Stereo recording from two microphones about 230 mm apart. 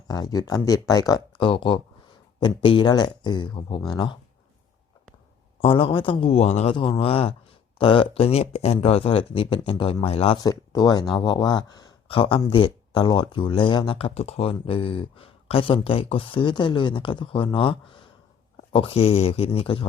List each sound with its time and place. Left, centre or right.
0.1 s speech: centre
5.5 s speech: left